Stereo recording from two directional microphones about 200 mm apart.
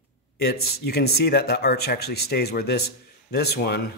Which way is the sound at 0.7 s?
55° left (ahead or behind).